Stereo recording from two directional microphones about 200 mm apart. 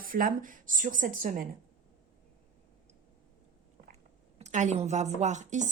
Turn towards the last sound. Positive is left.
turn(degrees=-35)  # may be behind; listen again after turning